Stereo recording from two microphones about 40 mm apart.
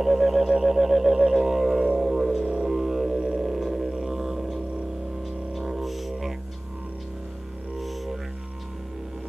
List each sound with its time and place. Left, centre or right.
0.0 s a sound: centre
0.6 s music: centre
2.4 s music: right
2.7 s music: centre
3.2 s music: right
3.4 s music: centre
7.8 s music: centre